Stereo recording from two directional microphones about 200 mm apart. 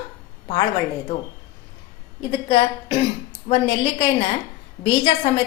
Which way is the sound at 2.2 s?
25° left (ahead or behind).